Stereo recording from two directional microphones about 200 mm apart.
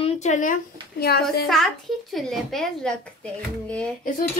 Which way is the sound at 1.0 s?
50° left (ahead or behind).